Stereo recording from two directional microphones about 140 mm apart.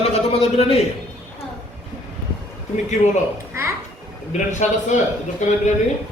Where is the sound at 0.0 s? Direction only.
45° left (ahead or behind).